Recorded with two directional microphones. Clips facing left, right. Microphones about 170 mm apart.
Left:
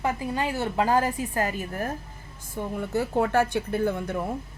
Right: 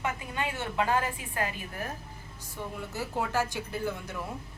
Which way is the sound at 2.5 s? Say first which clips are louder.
Left 10 dB; 55° left (ahead or behind).